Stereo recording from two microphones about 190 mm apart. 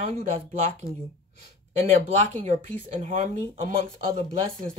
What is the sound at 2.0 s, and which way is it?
Speech, 40° right (ahead or behind).